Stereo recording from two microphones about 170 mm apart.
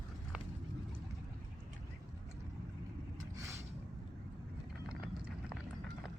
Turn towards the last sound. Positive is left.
turn(degrees=-5)  # may be behind; listen again after turning